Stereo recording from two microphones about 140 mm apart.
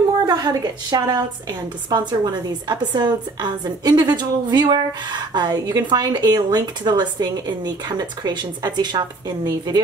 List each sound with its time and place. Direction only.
0.3 s a woman's voice: 30° right (ahead or behind)